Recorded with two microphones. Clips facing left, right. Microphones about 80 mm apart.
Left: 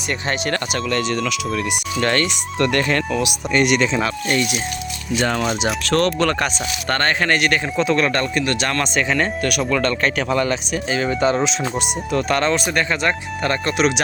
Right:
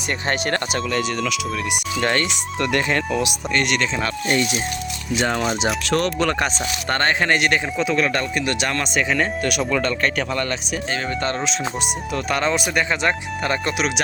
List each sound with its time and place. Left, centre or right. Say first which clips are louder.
0.3 s speech: right 1 dB; right
0.9 s speech: left 4 dB; centre
2.0 s speech: left 2 dB; centre
3.5 s speech: left 5 dB; centre
4.3 s speech: right 3 dB; right
5.1 s speech: left 1 dB; centre
7.8 s speech: left 5 dB; centre
10.0 s speech: left 3 dB; centre
12.1 s speech: left 3 dB; centre